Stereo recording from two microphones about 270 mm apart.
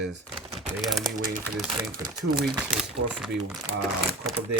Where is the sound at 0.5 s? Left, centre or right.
Centre.